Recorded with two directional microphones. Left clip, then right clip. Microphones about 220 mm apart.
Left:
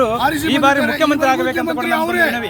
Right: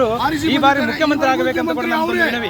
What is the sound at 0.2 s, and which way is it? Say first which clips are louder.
Speech: left 2 dB; 45° left (ahead or behind).